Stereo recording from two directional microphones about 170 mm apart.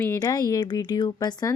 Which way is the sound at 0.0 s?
20° left (ahead or behind).